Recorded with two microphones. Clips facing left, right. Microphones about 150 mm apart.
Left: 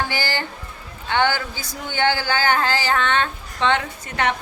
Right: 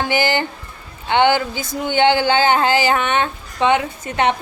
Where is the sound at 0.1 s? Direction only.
20° right (ahead or behind).